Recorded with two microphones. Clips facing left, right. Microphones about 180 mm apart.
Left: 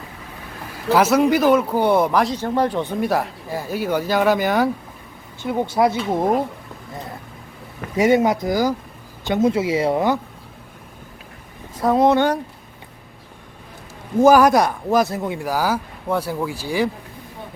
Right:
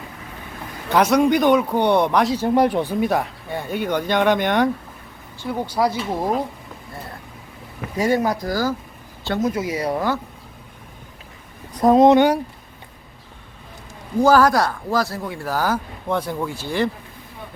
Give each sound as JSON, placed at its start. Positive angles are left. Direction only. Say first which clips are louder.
{"t": 0.9, "sound": "speech", "louder": "left 1 dB", "side_deg": 5}
{"t": 2.4, "sound": "speech", "louder": "right 3 dB", "side_deg": -15}
{"t": 5.4, "sound": "speech", "louder": "left 3 dB", "side_deg": 20}
{"t": 7.9, "sound": "speech", "louder": "left 4 dB", "side_deg": 20}
{"t": 11.7, "sound": "speech", "louder": "right 3 dB", "side_deg": -20}
{"t": 14.2, "sound": "speech", "louder": "left 2 dB", "side_deg": 20}